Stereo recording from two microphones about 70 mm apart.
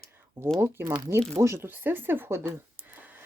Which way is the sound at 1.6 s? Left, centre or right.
Right.